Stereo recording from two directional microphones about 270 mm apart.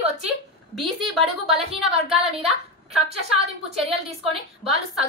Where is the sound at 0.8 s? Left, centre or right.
Centre.